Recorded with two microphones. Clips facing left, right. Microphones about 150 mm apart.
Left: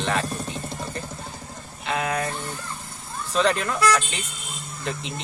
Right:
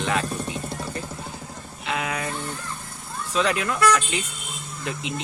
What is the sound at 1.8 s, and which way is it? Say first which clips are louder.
Speech: left 2 dB; 40° left (ahead or behind).